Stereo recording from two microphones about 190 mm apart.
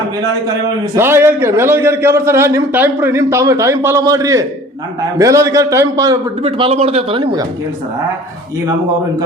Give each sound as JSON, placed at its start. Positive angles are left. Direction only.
{"t": 0.9, "sound": "a man's voice", "side_deg": -15}
{"t": 6.4, "sound": "a man's voice", "side_deg": -30}